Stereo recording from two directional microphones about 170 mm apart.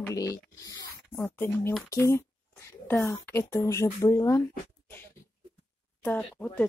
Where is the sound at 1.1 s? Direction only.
10° left (ahead or behind).